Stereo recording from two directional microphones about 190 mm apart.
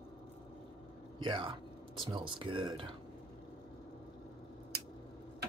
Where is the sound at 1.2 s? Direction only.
25° right (ahead or behind).